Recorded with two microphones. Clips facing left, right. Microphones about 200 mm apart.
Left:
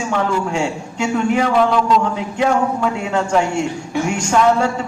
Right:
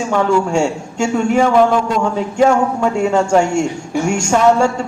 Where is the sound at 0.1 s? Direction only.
45° right (ahead or behind).